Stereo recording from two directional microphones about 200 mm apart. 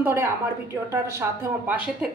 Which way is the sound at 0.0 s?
10° right (ahead or behind).